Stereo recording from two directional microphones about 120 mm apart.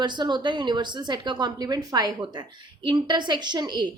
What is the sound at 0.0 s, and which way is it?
A woman's voice, 40° right (ahead or behind).